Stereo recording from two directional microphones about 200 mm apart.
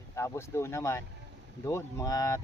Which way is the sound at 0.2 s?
15° left (ahead or behind).